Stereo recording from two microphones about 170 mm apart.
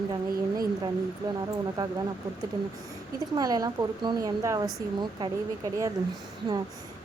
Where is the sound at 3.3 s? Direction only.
20° right (ahead or behind).